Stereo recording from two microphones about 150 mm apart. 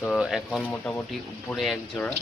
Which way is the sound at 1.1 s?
Centre (ahead or behind).